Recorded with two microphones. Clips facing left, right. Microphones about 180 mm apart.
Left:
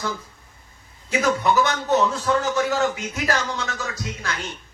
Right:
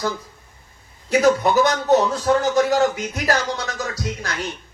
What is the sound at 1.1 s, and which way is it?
A man's voice, 40° right (ahead or behind).